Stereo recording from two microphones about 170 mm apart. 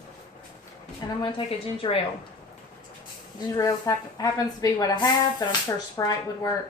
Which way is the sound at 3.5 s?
20° left (ahead or behind).